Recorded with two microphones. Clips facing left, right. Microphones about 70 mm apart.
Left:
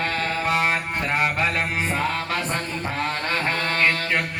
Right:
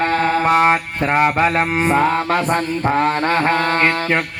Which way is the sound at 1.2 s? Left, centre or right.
Right.